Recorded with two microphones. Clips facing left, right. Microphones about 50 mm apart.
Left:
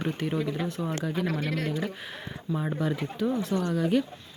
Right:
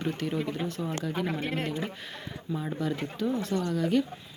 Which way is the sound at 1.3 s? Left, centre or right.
Right.